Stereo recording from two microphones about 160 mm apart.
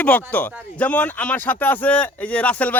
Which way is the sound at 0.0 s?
10° left (ahead or behind).